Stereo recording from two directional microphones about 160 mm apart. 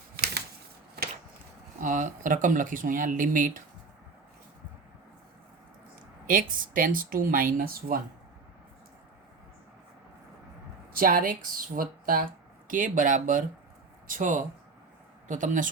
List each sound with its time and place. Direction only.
1.8 s speech: 50° right (ahead or behind)
6.2 s speech: 60° right (ahead or behind)
10.9 s speech: 60° right (ahead or behind)